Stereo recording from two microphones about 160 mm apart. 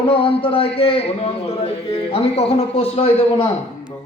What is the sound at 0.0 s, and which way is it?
Speech, 35° left (ahead or behind).